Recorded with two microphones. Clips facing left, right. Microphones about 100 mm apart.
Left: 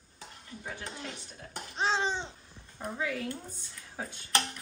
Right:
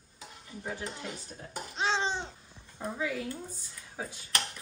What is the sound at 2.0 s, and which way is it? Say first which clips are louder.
Babbling: even; 15° right (ahead or behind).